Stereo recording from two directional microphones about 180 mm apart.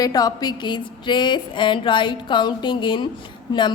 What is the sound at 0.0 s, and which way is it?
A woman's voice, 20° left (ahead or behind).